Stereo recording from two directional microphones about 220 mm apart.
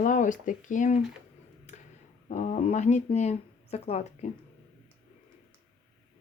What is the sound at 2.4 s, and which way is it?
Speech, 30° left (ahead or behind).